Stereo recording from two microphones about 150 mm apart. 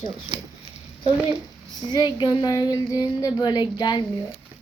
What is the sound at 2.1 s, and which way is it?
Speech, 30° left (ahead or behind).